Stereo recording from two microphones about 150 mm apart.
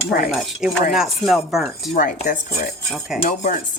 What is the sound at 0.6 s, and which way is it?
Speech, 5° right (ahead or behind).